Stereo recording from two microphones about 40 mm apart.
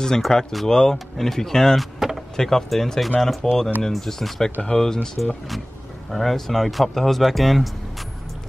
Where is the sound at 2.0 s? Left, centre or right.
Centre.